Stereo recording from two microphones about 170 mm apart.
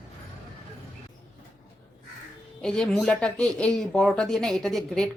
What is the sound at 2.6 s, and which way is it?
Speech, 5° left (ahead or behind).